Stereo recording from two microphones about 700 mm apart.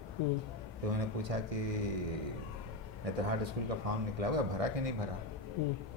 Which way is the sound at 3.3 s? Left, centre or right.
Right.